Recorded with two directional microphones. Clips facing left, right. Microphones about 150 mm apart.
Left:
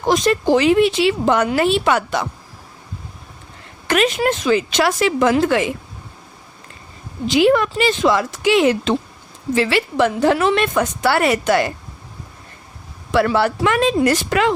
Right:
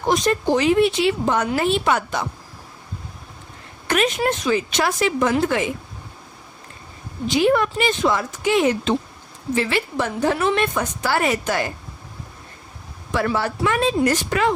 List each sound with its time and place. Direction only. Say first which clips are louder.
0.1 s a woman's voice: left 4 dB; 90° left
3.8 s a woman's voice: left 3 dB; 90° left
7.3 s a woman's voice: left 3 dB; 90° left; by 11.7 s 75° left (ahead or behind)
13.1 s a woman's voice: left 6 dB; 85° left